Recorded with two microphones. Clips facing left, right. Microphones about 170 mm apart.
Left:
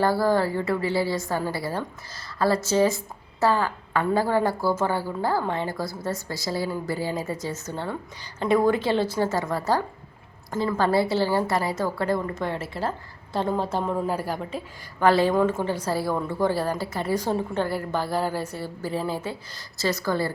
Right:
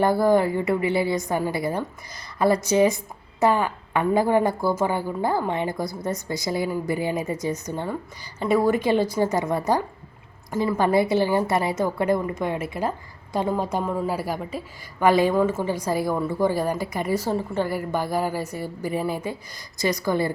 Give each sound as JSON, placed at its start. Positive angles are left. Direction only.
{"t": 0.0, "sound": "a woman's voice", "side_deg": -20}